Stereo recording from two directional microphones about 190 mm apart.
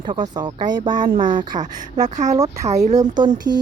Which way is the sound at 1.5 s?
40° right (ahead or behind).